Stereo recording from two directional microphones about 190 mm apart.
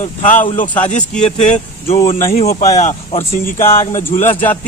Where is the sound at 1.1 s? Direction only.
5° left (ahead or behind).